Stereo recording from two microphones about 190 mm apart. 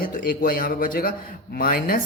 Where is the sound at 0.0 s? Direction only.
45° left (ahead or behind).